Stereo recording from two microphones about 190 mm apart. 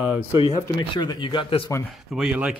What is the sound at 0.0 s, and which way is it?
Speech, 10° right (ahead or behind).